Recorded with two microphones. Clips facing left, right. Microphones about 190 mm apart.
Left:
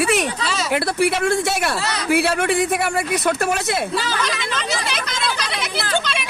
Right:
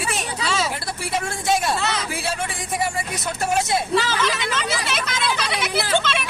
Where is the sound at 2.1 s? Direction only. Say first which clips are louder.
Left 10 dB; 65° left (ahead or behind).